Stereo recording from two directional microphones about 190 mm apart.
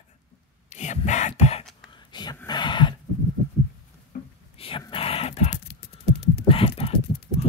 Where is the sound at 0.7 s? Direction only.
40° left (ahead or behind).